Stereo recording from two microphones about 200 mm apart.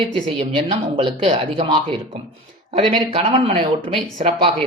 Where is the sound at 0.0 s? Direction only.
25° right (ahead or behind).